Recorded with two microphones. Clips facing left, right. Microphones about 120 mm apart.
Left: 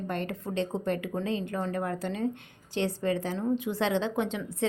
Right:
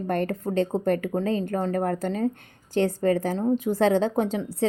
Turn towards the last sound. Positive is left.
turn(degrees=-35)  # may be behind; listen again after turning